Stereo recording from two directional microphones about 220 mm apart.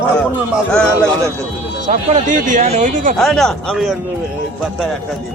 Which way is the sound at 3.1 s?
Centre (ahead or behind).